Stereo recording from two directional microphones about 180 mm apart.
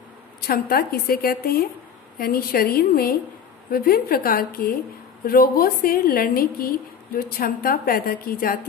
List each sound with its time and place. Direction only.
0.4 s a woman's voice: 55° left (ahead or behind)